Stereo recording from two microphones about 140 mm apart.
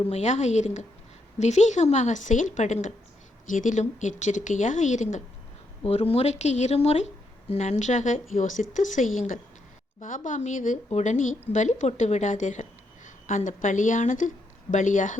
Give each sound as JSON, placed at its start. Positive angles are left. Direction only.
{"t": 0.0, "sound": "speech", "side_deg": 50}
{"t": 5.8, "sound": "speech", "side_deg": 45}